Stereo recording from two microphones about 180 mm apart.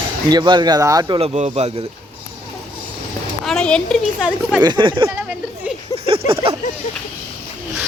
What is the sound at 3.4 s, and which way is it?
Speech, 5° left (ahead or behind).